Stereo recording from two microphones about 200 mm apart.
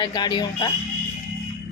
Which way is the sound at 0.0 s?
20° left (ahead or behind).